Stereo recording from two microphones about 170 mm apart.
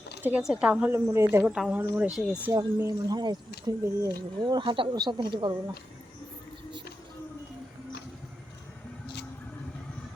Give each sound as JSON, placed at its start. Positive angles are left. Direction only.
{"t": 0.2, "sound": "a woman's voice", "side_deg": -10}
{"t": 2.5, "sound": "speech", "side_deg": -20}